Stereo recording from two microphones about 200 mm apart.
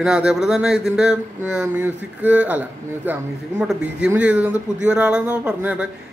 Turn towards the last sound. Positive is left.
turn(degrees=-5)  # may be behind; listen again after turning